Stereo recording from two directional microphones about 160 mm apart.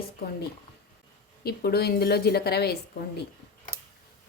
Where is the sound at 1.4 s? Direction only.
80° left.